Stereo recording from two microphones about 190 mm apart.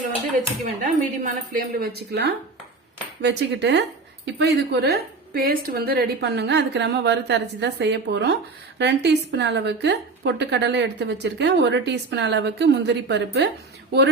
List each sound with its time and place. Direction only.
0.8 s speech: 45° right (ahead or behind)
3.2 s cutlery: 65° right (ahead or behind)
4.4 s a woman's voice: 60° right (ahead or behind)